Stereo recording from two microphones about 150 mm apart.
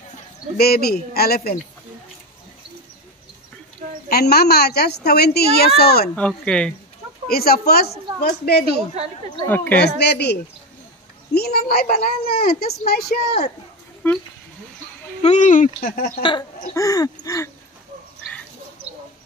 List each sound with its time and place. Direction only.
0.6 s a woman's voice: 90° left
4.1 s a woman's voice: 90° left
6.1 s speech: 5° left (ahead or behind)
7.2 s a woman's voice: 90° left
8.6 s a woman's voice: 40° right (ahead or behind)
9.8 s a woman's voice: 90° left
14.0 s speech: 10° left (ahead or behind)
15.2 s speech: 55° left (ahead or behind); by 16.1 s 70° left (ahead or behind)
16.1 s speech: 30° left (ahead or behind)
16.7 s a sound: 25° left (ahead or behind)